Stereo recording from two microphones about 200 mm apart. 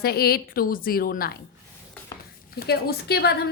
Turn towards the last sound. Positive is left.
turn(degrees=50)  # may be behind; listen again after turning